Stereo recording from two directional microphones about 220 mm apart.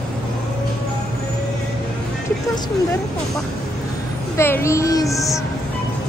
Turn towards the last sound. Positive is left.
turn(degrees=15)  # may be behind; listen again after turning